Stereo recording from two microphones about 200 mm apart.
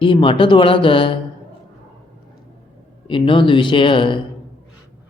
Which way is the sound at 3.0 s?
25° left (ahead or behind).